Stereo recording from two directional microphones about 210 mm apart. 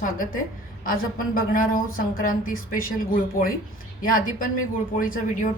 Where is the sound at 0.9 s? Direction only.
40° left (ahead or behind).